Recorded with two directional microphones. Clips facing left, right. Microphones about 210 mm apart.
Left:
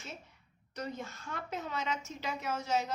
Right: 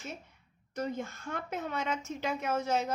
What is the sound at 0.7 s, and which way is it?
A woman's voice, 50° right (ahead or behind).